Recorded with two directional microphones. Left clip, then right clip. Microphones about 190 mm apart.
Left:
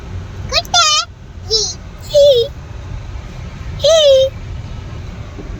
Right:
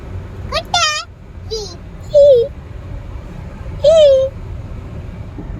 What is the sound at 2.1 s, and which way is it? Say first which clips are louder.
Babbling: right 1 dB; 10° right (ahead or behind).